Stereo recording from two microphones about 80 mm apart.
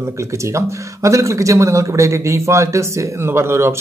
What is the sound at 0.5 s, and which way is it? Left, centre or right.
Speech, right.